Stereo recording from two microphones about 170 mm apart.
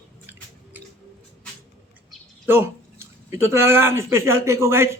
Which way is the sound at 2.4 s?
15° right (ahead or behind).